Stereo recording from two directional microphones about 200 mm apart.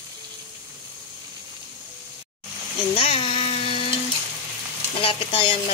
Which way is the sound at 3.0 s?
30° left (ahead or behind).